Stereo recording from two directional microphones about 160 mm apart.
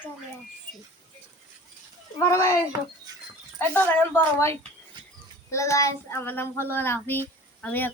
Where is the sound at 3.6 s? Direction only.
10° left (ahead or behind).